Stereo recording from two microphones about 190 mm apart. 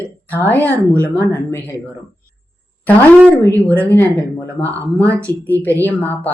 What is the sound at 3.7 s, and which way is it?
Speech, 10° left (ahead or behind).